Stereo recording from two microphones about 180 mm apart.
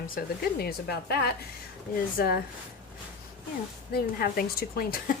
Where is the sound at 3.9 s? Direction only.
60° left (ahead or behind).